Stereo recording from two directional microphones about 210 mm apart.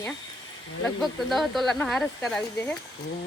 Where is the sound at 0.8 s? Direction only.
Centre (ahead or behind).